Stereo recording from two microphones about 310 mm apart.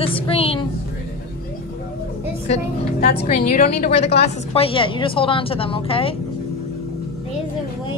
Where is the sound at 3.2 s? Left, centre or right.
Left.